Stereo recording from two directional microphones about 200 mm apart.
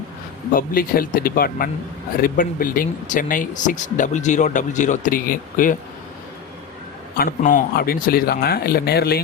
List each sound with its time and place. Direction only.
0.5 s speech: 45° left (ahead or behind)
7.2 s speech: 45° left (ahead or behind)